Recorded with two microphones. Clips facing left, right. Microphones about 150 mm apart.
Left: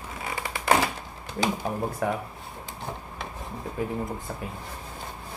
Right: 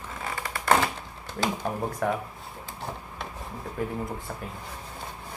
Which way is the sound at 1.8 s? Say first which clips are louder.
Right 1 dB; 5° left (ahead or behind).